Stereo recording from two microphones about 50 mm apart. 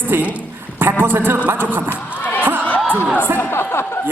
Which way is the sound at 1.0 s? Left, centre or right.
Right.